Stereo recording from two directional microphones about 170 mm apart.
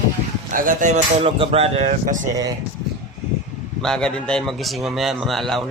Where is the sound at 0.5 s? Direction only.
55° right (ahead or behind).